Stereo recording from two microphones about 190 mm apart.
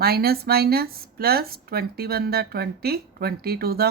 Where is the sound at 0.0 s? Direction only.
55° right (ahead or behind).